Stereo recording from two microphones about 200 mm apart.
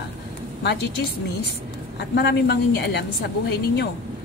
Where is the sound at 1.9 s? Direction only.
55° left (ahead or behind).